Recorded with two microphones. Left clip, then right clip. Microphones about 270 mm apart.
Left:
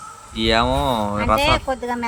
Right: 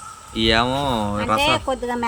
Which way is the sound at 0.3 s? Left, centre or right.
Centre.